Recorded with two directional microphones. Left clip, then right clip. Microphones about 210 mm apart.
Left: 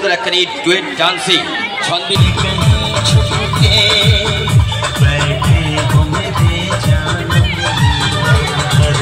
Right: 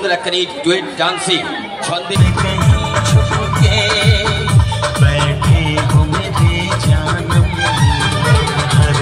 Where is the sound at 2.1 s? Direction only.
5° right (ahead or behind).